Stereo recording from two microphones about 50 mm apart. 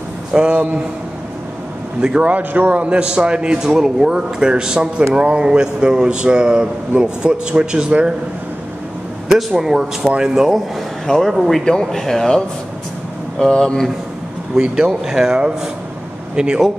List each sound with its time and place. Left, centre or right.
0.3 s a man's voice: centre
2.1 s a man's voice: right
9.3 s a man's voice: centre
11.1 s speech: centre
14.5 s a man's voice: centre